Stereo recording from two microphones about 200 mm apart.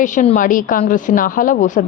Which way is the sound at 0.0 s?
40° left (ahead or behind).